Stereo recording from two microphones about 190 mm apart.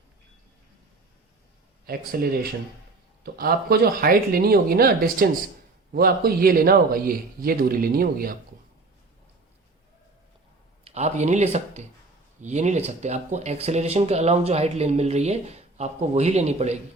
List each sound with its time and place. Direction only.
1.9 s speech: 50° right (ahead or behind)
10.8 s speech: 35° right (ahead or behind)